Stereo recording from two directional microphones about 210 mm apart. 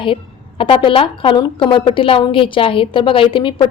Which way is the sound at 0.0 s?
25° left (ahead or behind).